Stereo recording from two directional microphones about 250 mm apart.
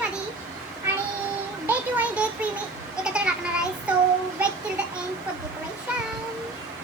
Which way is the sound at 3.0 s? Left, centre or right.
Centre.